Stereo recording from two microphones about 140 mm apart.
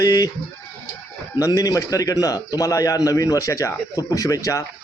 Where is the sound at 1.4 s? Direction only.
25° left (ahead or behind).